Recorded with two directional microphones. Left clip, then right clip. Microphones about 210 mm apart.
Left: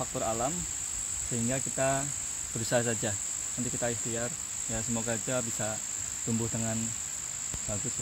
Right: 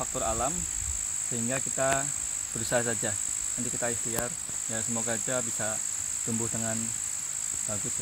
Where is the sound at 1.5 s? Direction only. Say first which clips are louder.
Right 2 dB; 10° left (ahead or behind).